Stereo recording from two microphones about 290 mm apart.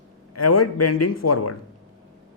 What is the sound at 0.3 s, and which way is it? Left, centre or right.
Speech, left.